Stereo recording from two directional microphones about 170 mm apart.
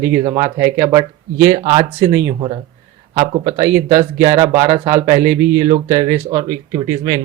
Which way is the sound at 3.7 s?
45° right (ahead or behind).